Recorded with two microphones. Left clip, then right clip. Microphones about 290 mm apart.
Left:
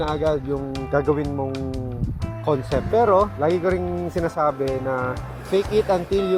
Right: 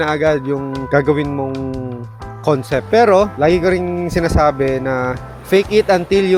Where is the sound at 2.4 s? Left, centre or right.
Right.